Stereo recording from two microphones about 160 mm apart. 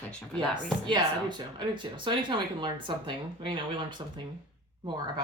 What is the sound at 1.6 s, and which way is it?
Speech, 30° right (ahead or behind).